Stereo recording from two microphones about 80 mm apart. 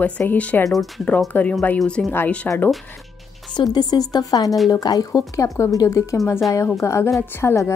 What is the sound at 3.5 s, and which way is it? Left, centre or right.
A woman's voice, left.